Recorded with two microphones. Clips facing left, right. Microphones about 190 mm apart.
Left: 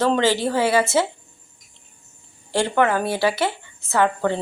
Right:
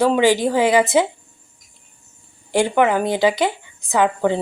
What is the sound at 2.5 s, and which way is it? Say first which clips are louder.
Speech: right 3 dB; 15° right (ahead or behind).